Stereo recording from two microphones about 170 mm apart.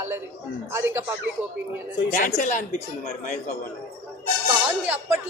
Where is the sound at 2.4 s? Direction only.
50° left (ahead or behind).